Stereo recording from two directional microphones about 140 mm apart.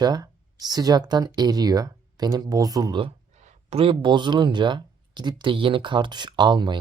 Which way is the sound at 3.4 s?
45° right (ahead or behind).